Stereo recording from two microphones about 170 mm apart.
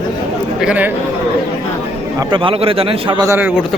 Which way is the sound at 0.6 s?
5° right (ahead or behind).